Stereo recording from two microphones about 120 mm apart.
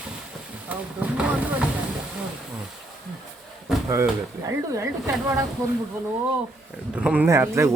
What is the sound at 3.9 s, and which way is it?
Speech, 25° right (ahead or behind).